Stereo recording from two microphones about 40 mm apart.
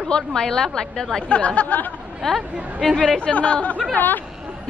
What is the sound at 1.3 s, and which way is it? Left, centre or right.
Speech, left.